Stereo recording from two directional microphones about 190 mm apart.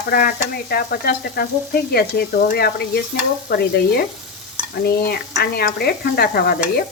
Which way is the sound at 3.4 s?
60° left (ahead or behind).